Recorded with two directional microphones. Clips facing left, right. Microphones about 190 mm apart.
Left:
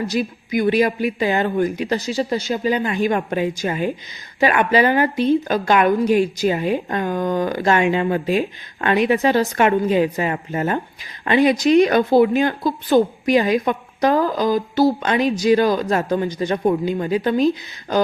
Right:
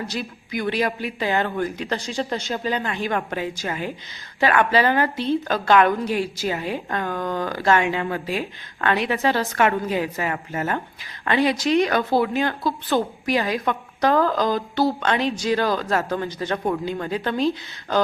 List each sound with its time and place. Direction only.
0.1 s speech: 15° left (ahead or behind)